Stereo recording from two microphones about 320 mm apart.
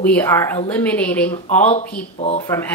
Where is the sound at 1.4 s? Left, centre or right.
Left.